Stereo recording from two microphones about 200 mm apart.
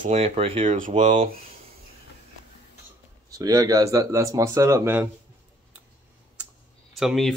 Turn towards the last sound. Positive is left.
turn(degrees=0)  # may be behind; listen again after turning